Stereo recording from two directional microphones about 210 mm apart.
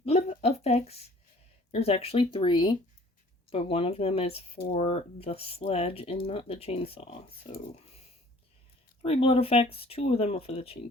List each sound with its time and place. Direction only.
0.0 s a sound: 30° left (ahead or behind)
1.7 s speech: 30° left (ahead or behind)
9.0 s speech: 30° left (ahead or behind)